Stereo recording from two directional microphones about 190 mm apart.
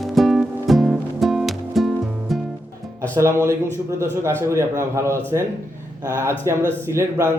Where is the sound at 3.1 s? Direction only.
15° right (ahead or behind).